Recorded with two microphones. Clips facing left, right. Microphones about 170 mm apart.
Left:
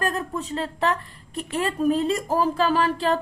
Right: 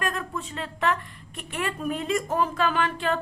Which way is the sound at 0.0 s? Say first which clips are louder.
Left 4 dB; 40° left (ahead or behind).